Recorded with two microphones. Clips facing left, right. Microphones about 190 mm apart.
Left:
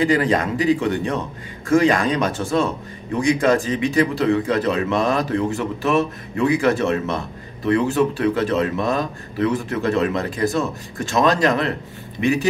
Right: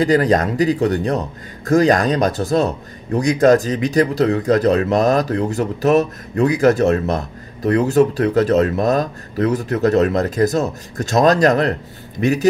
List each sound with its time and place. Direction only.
0.0 s speech: 40° right (ahead or behind)